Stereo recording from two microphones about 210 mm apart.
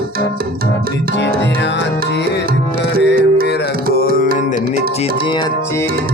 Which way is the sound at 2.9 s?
45° right (ahead or behind).